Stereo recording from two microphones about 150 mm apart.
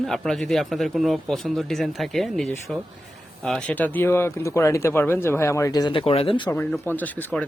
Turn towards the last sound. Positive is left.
turn(degrees=10)  # may be behind; listen again after turning